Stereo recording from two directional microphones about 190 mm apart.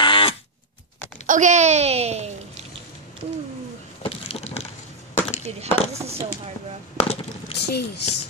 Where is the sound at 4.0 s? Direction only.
30° left (ahead or behind).